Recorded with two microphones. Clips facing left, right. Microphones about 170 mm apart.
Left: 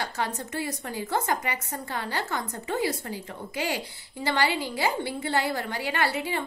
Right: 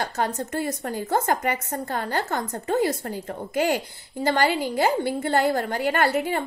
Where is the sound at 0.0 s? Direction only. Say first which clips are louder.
Right 5 dB; 45° right (ahead or behind).